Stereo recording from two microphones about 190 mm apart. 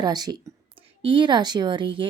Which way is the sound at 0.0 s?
20° right (ahead or behind).